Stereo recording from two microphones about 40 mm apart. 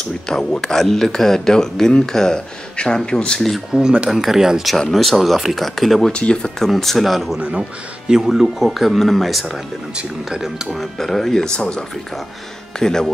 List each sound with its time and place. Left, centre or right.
0.3 s speech: centre
3.3 s speech: centre
3.7 s speech: right
4.1 s speech: centre
4.7 s speech: centre
6.1 s speech: left
6.7 s speech: centre
8.1 s speech: centre
11.0 s speech: centre
12.7 s speech: centre